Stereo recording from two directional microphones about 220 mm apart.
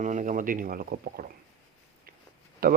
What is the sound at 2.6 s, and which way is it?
Speech, 45° right (ahead or behind).